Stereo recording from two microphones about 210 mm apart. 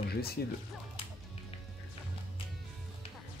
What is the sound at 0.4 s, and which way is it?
Speech, 45° left (ahead or behind).